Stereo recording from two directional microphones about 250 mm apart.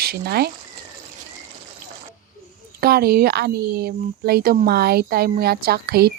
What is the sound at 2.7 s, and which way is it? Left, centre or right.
A woman's voice, right.